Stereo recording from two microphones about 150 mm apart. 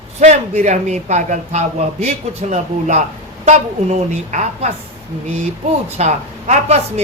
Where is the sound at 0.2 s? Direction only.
50° right (ahead or behind).